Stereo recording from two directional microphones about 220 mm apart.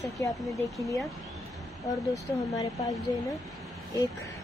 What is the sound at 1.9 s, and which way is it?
Speech, 15° left (ahead or behind).